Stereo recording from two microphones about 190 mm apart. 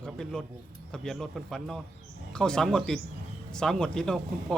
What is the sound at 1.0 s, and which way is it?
Speech, centre (ahead or behind).